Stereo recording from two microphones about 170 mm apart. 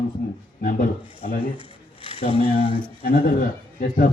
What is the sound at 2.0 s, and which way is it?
Speech, 35° left (ahead or behind).